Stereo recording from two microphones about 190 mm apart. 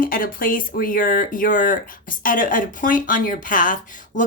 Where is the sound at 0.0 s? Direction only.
50° left (ahead or behind).